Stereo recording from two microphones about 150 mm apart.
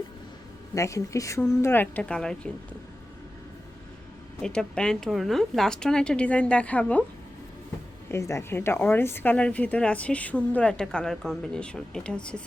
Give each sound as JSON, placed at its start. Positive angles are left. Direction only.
{"t": 0.7, "sound": "a woman's voice", "side_deg": 20}
{"t": 4.4, "sound": "a woman's voice", "side_deg": 5}
{"t": 8.1, "sound": "a woman's voice", "side_deg": 20}